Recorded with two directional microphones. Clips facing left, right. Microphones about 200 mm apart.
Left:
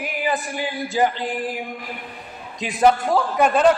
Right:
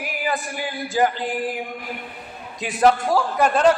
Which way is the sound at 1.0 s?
15° left (ahead or behind).